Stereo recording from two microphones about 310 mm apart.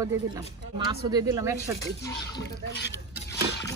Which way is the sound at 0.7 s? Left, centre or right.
Centre.